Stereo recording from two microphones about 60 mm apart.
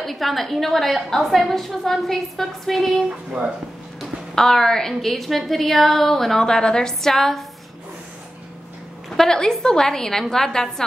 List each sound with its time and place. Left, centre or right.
0.0 s a woman's voice: centre
3.1 s a woman's voice: centre
4.0 s a woman's voice: centre
9.1 s a woman's voice: centre